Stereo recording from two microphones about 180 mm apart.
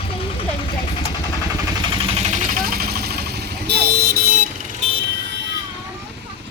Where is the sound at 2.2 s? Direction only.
40° right (ahead or behind); by 4.1 s 65° right (ahead or behind).